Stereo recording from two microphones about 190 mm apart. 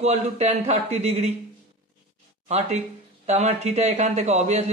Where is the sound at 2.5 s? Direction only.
35° right (ahead or behind).